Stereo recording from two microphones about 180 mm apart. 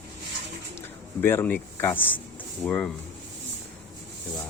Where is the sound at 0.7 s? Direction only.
15° left (ahead or behind).